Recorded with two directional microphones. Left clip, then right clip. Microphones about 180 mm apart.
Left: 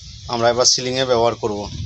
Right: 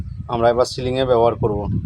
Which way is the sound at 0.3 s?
5° right (ahead or behind).